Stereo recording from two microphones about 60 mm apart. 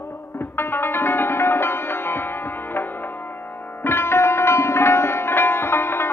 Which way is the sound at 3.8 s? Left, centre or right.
Left.